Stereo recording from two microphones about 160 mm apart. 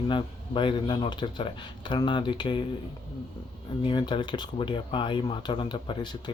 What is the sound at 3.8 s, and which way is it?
Speech, 30° left (ahead or behind).